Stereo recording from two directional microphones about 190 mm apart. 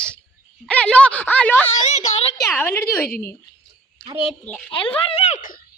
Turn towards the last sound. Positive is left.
turn(degrees=40)  # may be behind; listen again after turning